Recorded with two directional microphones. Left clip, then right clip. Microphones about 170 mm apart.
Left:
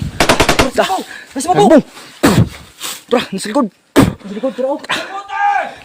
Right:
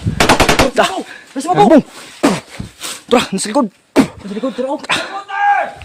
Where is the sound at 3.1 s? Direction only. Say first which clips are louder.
Right 2 dB; 15° right (ahead or behind).